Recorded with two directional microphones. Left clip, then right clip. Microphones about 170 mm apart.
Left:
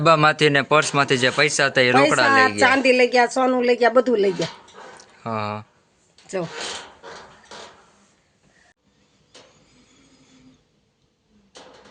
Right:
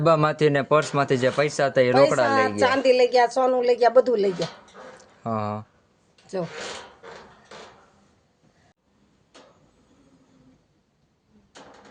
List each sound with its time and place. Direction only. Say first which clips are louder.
0.0 s speech: left 4 dB; 10° right (ahead or behind)
2.6 s a woman's voice: left 3 dB; 45° left (ahead or behind)
4.9 s a sound: left 1 dB; 15° right (ahead or behind)